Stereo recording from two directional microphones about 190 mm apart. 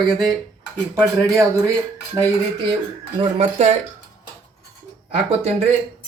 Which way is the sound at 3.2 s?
35° right (ahead or behind).